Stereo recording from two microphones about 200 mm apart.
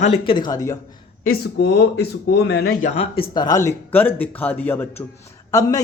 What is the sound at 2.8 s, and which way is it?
Speech, 35° left (ahead or behind).